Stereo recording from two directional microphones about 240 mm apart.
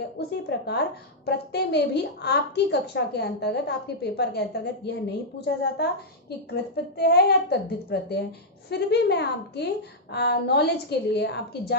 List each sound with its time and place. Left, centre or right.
0.5 s a woman's voice: left